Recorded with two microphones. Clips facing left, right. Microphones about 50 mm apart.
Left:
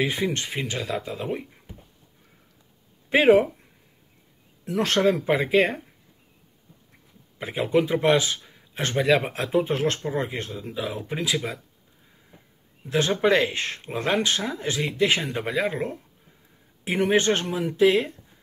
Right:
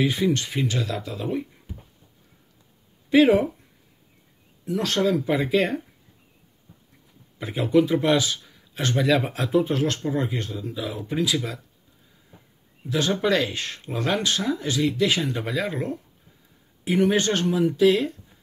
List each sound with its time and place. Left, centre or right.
0.0 s speech: left
3.1 s speech: left
4.6 s speech: left
7.3 s speech: left
13.1 s speech: left
17.0 s speech: left